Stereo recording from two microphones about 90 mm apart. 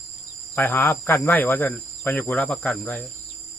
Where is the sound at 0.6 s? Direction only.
20° left (ahead or behind).